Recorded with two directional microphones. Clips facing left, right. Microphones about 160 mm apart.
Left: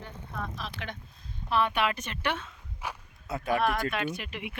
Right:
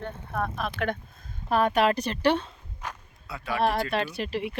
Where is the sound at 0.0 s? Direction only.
60° right (ahead or behind).